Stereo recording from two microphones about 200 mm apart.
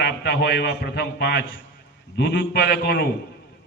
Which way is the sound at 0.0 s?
55° left (ahead or behind).